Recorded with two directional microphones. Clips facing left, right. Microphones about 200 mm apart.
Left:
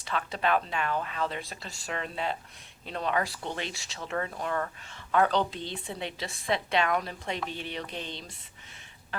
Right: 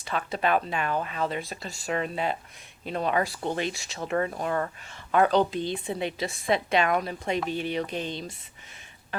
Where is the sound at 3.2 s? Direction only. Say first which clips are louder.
Right 6 dB; 45° right (ahead or behind).